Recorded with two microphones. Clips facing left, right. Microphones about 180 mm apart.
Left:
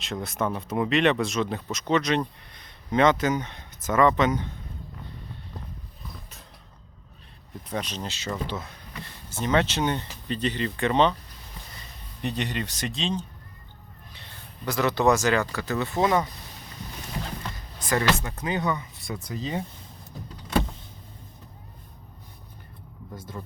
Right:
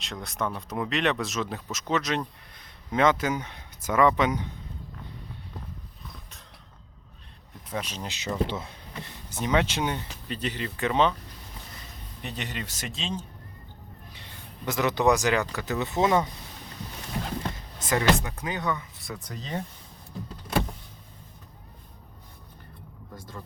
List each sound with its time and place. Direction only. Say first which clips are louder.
0.0 s speech: left 3 dB; centre (ahead or behind)
7.7 s speech: left 2 dB; 5° right (ahead or behind)
12.2 s speech: left 6 dB; 5° right (ahead or behind)
14.6 s speech: left 1 dB; 20° right (ahead or behind)
17.7 s music: left 1 dB; 20° right (ahead or behind)
18.3 s speech: left 4 dB; 5° right (ahead or behind)
18.7 s speech: left 2 dB; 15° left (ahead or behind)